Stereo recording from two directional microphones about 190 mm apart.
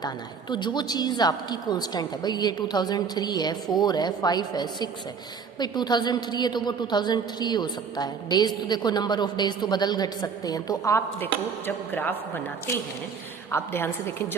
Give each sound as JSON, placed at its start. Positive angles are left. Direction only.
{"t": 0.5, "sound": "a woman's voice", "side_deg": 25}
{"t": 13.5, "sound": "a woman's voice", "side_deg": 10}